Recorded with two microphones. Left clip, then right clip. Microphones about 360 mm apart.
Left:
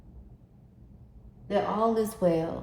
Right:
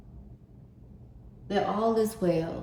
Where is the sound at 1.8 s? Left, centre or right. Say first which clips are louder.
Left 1 dB; centre.